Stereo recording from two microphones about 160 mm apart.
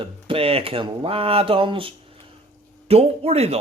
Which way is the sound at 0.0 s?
35° right (ahead or behind).